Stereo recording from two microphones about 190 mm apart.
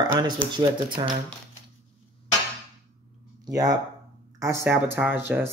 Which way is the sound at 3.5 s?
20° right (ahead or behind).